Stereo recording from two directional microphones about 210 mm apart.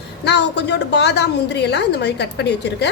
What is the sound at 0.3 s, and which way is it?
A woman's voice, 55° left (ahead or behind).